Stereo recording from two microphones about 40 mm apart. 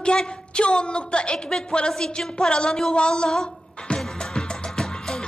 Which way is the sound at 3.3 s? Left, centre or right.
Left.